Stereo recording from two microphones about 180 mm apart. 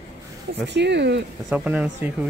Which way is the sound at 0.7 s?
70° right (ahead or behind).